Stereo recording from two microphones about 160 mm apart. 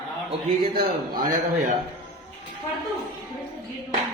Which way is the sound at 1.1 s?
65° right (ahead or behind).